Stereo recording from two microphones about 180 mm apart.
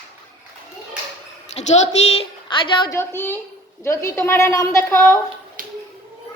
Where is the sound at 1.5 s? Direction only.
40° left (ahead or behind).